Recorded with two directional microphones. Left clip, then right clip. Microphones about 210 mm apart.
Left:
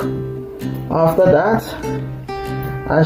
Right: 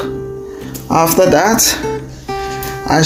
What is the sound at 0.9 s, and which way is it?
Speech, 55° right (ahead or behind).